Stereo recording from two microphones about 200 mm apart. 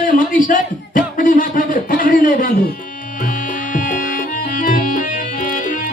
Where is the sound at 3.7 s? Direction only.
40° left (ahead or behind).